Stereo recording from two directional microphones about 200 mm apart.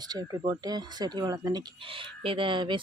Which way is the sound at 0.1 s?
20° right (ahead or behind).